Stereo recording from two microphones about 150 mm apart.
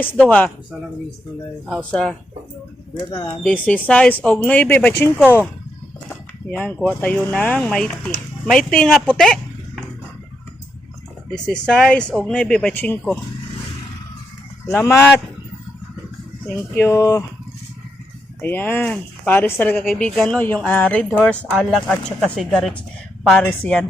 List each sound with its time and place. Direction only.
0.0 s speech: 10° left (ahead or behind)
1.6 s speech: centre (ahead or behind)
3.4 s speech: 10° left (ahead or behind)
11.3 s speech: 5° left (ahead or behind)
14.7 s speech: 15° left (ahead or behind)
16.7 s speech: 20° left (ahead or behind)
18.4 s speech: 15° left (ahead or behind)
19.8 s speech: centre (ahead or behind)